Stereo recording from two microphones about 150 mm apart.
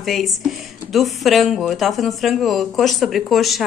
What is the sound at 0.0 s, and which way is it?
Speech, centre (ahead or behind).